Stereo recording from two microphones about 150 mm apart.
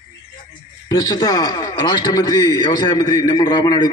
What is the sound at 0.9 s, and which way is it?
A man's voice, 25° left (ahead or behind).